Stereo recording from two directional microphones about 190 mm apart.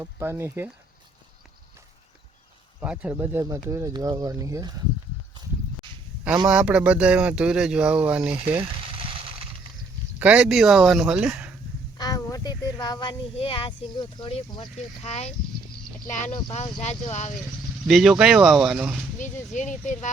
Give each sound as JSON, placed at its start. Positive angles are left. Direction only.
{"t": 0.0, "sound": "speech", "side_deg": -15}
{"t": 2.8, "sound": "speech", "side_deg": -5}
{"t": 6.5, "sound": "speech", "side_deg": -5}
{"t": 10.2, "sound": "speech", "side_deg": -5}
{"t": 11.9, "sound": "speech", "side_deg": 20}
{"t": 17.8, "sound": "speech", "side_deg": 0}
{"t": 19.5, "sound": "speech", "side_deg": 40}